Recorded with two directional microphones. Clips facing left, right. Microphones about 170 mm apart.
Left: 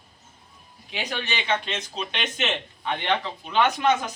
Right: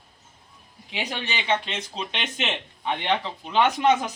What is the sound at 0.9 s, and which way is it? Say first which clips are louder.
Speech: even; 20° right (ahead or behind).